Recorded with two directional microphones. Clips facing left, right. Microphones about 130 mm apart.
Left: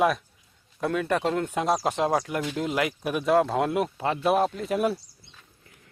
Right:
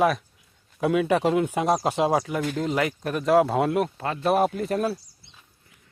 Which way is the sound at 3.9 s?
20° left (ahead or behind).